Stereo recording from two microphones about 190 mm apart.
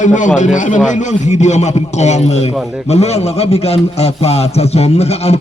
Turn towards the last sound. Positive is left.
turn(degrees=35)  # may be behind; listen again after turning